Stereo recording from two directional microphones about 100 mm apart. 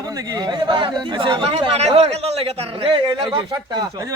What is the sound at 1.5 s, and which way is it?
A man's voice, 90° right.